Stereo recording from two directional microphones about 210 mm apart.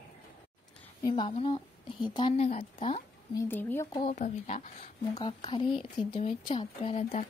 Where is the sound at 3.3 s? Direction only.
10° left (ahead or behind).